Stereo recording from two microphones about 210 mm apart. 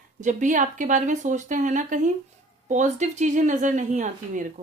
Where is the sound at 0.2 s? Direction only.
35° right (ahead or behind).